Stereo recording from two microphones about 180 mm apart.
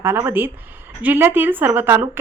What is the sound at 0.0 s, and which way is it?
A woman's voice, 15° right (ahead or behind).